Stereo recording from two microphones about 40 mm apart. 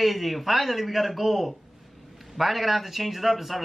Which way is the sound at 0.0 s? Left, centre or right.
Centre.